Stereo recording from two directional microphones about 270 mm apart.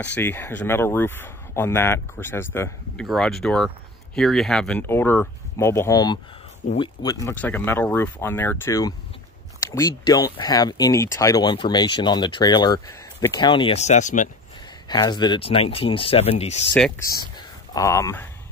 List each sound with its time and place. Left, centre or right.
0.0 s speech: centre; by 14.3 s left
14.9 s speech: centre
17.7 s speech: centre